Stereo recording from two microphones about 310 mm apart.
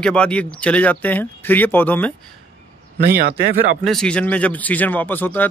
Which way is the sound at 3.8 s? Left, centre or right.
Centre.